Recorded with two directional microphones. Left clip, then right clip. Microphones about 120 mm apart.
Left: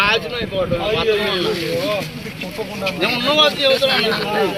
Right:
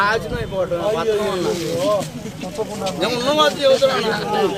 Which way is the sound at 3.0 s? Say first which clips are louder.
Left 2 dB; 15° right (ahead or behind).